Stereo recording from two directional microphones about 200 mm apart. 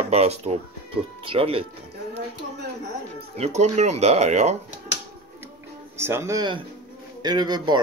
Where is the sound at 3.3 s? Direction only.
35° right (ahead or behind).